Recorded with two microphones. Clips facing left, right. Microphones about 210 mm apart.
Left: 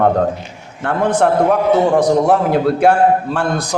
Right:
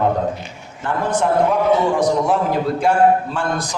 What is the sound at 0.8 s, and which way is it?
A man's voice, 70° left (ahead or behind).